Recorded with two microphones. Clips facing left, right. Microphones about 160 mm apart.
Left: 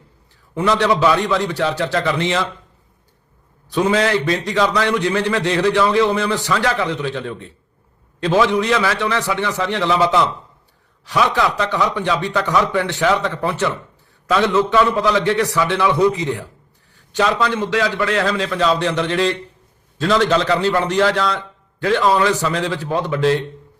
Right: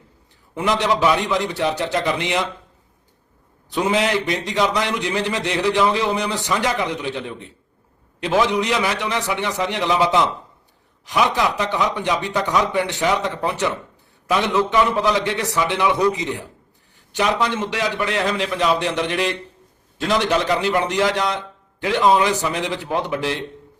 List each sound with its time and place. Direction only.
0.5 s a man's voice: 20° right (ahead or behind)
3.7 s a man's voice: 20° right (ahead or behind)